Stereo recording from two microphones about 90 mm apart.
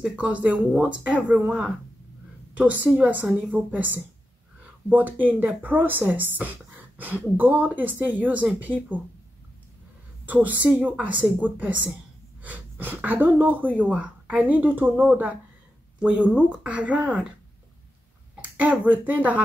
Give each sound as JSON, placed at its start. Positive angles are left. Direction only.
{"t": 0.0, "sound": "speech", "side_deg": -15}
{"t": 10.2, "sound": "speech", "side_deg": -15}
{"t": 18.3, "sound": "speech", "side_deg": -15}